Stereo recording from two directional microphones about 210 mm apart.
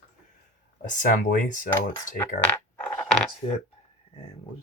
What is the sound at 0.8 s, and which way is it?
Speech, 40° left (ahead or behind).